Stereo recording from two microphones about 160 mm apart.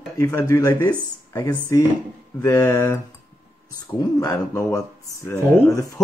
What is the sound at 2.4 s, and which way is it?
Speech, 15° left (ahead or behind).